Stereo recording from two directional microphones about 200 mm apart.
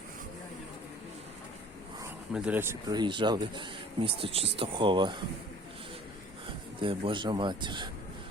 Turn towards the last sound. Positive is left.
turn(degrees=-25)  # may be behind; listen again after turning